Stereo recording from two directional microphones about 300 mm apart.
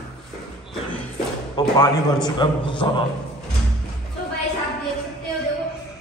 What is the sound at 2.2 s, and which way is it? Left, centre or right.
Speech, centre.